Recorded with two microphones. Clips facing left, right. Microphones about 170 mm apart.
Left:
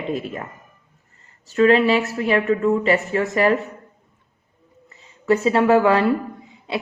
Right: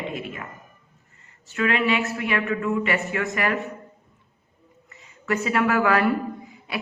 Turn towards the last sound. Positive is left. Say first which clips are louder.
# left 5 dB
turn(degrees=25)  # may be behind; listen again after turning